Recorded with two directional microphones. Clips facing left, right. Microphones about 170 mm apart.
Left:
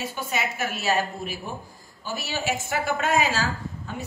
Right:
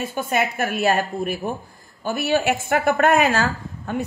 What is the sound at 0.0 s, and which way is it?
A woman's voice, 50° right (ahead or behind).